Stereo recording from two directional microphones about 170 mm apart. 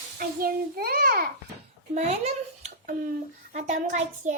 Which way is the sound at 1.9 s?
40° right (ahead or behind).